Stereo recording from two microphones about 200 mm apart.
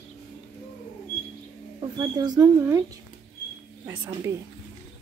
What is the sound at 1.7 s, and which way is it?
Speech, 20° right (ahead or behind).